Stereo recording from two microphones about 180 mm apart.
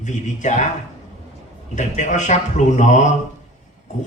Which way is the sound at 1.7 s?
45° left (ahead or behind).